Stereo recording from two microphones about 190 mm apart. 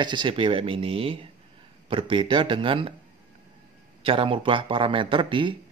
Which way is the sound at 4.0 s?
30° right (ahead or behind).